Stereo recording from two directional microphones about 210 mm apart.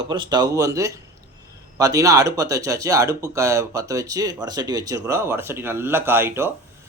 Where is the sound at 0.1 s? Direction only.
20° right (ahead or behind).